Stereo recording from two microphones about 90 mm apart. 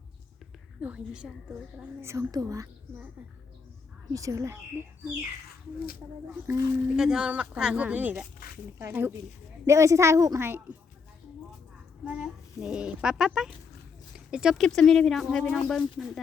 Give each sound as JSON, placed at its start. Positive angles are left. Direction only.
{"t": 0.8, "sound": "speech", "side_deg": -15}
{"t": 2.0, "sound": "a woman's voice", "side_deg": -30}
{"t": 4.1, "sound": "a woman's voice", "side_deg": -40}
{"t": 6.8, "sound": "speech", "side_deg": -5}
{"t": 9.6, "sound": "a woman's voice", "side_deg": -35}
{"t": 12.0, "sound": "speech", "side_deg": -10}
{"t": 14.6, "sound": "speech", "side_deg": 5}